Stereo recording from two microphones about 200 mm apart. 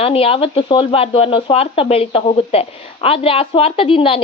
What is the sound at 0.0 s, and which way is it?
A woman's voice, 30° left (ahead or behind).